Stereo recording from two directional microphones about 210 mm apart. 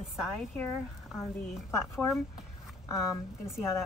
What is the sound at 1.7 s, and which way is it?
Speech, 15° left (ahead or behind).